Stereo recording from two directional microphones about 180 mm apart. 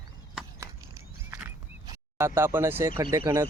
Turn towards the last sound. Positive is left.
turn(degrees=-15)  # may be behind; listen again after turning